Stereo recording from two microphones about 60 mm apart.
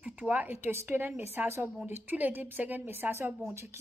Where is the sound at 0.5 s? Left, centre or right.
Right.